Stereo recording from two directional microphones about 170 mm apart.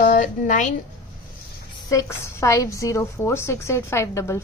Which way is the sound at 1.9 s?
20° left (ahead or behind).